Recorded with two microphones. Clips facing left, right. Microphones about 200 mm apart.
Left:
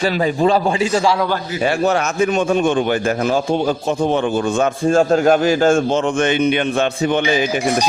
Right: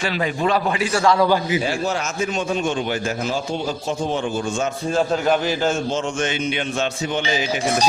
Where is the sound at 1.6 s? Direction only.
60° left (ahead or behind).